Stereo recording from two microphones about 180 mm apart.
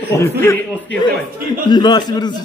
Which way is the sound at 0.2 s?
15° left (ahead or behind).